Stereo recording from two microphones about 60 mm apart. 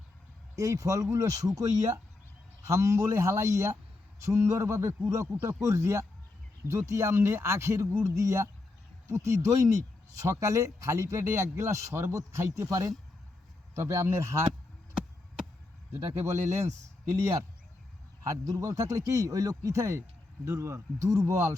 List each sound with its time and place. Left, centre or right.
0.5 s speech: right
2.6 s speech: right
13.7 s speech: right
15.9 s speech: right
18.2 s speech: right